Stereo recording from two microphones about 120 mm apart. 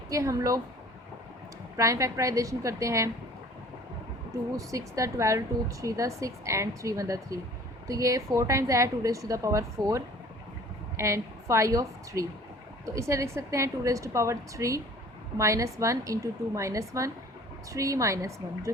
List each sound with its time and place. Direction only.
0.1 s a woman's voice: 25° right (ahead or behind)
1.7 s a woman's voice: 25° right (ahead or behind)
4.5 s a woman's voice: 25° right (ahead or behind)